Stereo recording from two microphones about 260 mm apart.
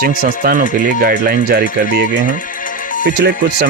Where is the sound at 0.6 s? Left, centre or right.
Left.